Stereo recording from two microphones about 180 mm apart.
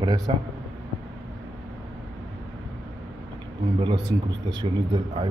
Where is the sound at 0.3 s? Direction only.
30° right (ahead or behind).